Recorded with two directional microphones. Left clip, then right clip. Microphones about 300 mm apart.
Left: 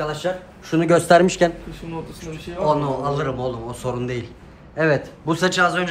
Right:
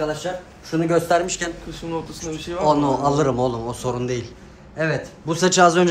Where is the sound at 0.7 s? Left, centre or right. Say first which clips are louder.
Left 4 dB; left.